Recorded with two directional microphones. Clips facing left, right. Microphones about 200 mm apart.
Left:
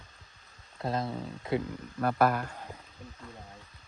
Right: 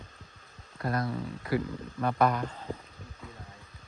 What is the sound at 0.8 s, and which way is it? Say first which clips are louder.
Speech: right 1 dB; 25° left (ahead or behind).